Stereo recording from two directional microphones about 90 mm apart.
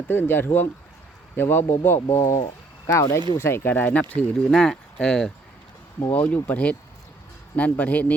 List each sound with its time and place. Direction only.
0.1 s speech: 25° left (ahead or behind)
4.1 s speech: 10° left (ahead or behind)
6.1 s speech: 20° left (ahead or behind)